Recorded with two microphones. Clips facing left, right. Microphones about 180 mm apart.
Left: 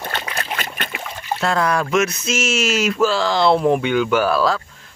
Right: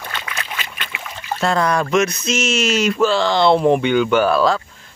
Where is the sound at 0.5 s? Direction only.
45° left (ahead or behind).